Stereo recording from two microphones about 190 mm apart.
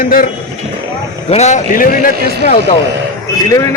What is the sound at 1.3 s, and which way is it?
A man's voice, 35° left (ahead or behind).